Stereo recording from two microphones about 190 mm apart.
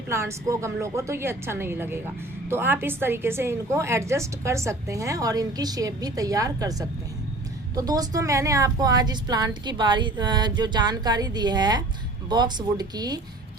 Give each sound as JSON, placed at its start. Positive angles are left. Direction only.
{"t": 0.1, "sound": "a woman's voice", "side_deg": -15}